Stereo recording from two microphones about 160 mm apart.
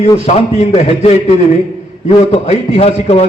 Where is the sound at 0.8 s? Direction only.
40° left (ahead or behind).